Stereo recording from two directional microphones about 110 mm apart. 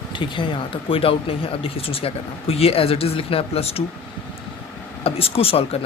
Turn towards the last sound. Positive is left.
turn(degrees=60)  # may be behind; listen again after turning